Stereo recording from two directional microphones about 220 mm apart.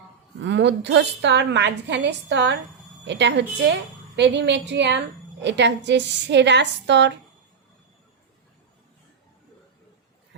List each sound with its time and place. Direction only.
0.4 s a woman's voice: 50° right (ahead or behind)